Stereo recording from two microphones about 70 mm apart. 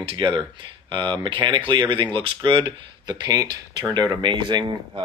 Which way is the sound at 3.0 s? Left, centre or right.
Right.